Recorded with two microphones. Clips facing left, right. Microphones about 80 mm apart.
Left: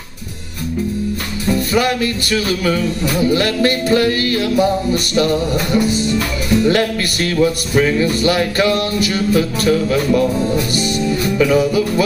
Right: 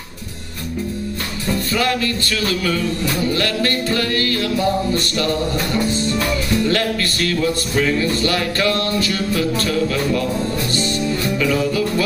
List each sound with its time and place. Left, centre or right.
1.5 s music: centre